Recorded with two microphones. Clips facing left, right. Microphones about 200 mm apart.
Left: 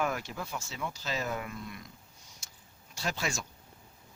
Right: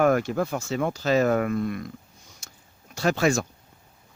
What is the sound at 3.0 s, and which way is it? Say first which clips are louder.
Speech: right 13 dB; 60° right (ahead or behind).